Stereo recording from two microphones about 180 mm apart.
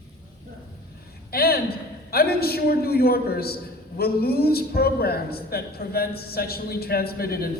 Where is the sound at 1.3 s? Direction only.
60° left (ahead or behind).